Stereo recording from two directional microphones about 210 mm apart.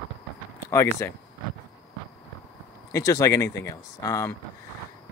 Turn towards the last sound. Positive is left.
turn(degrees=15)  # may be behind; listen again after turning